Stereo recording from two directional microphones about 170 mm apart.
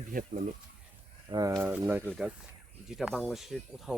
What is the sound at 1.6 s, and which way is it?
Speech, 10° right (ahead or behind).